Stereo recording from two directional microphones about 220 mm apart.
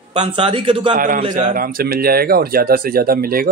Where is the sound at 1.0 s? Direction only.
40° right (ahead or behind).